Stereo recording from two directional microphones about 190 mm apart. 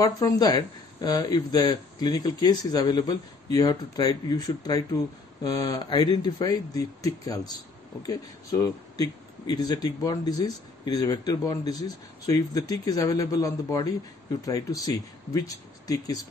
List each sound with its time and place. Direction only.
0.0 s speech: 20° left (ahead or behind)